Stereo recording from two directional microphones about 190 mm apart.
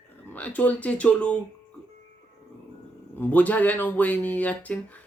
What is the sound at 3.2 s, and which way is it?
Speech, 10° left (ahead or behind).